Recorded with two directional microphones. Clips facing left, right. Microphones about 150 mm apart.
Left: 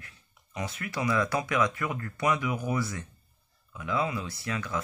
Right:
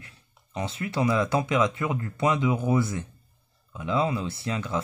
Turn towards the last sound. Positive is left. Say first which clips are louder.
# right 4 dB
turn(degrees=-25)  # may be behind; listen again after turning